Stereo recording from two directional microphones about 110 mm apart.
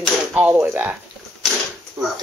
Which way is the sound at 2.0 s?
30° right (ahead or behind).